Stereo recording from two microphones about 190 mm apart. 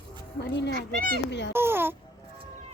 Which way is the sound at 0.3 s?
65° left (ahead or behind).